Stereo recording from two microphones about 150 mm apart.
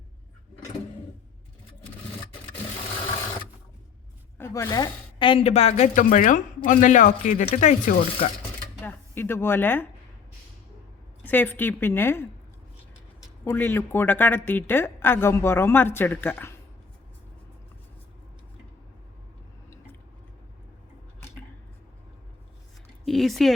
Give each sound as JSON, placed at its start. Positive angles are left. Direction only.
{"t": 4.4, "sound": "a woman's voice", "side_deg": 15}
{"t": 8.4, "sound": "a sound", "side_deg": 15}
{"t": 11.3, "sound": "a woman's voice", "side_deg": 15}
{"t": 13.4, "sound": "a woman's voice", "side_deg": 15}
{"t": 23.0, "sound": "speech", "side_deg": 0}